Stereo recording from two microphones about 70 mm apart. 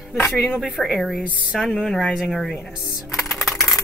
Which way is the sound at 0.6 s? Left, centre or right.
Centre.